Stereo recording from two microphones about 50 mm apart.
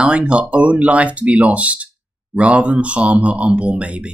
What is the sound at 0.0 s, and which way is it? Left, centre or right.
Speech, right.